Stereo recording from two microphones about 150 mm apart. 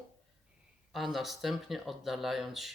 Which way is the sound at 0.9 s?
Centre (ahead or behind).